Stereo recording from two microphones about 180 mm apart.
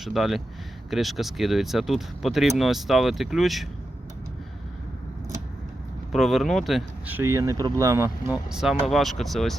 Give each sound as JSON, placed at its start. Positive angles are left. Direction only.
{"t": 0.0, "sound": "speech", "side_deg": 0}
{"t": 6.1, "sound": "speech", "side_deg": 0}
{"t": 7.2, "sound": "speech", "side_deg": -15}
{"t": 8.4, "sound": "speech", "side_deg": 0}